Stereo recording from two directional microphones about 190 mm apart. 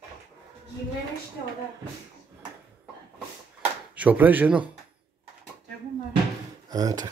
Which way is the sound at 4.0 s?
10° right (ahead or behind).